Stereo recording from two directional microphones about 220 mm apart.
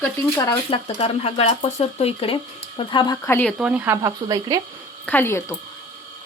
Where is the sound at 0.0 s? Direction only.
15° left (ahead or behind).